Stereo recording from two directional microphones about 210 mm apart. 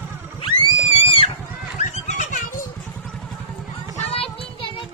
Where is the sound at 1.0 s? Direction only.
25° left (ahead or behind).